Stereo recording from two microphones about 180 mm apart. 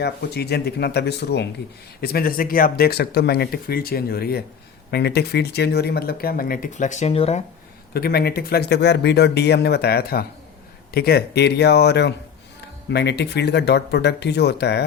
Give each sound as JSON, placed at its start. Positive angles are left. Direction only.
{"t": 0.0, "sound": "speech", "side_deg": 65}
{"t": 7.9, "sound": "speech", "side_deg": 60}